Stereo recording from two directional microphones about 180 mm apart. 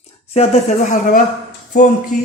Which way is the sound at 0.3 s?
40° left (ahead or behind).